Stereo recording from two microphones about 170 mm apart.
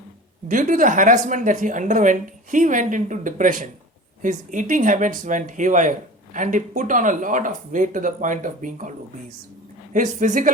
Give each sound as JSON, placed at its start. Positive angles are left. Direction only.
{"t": 0.4, "sound": "speech", "side_deg": -50}
{"t": 9.9, "sound": "speech", "side_deg": -45}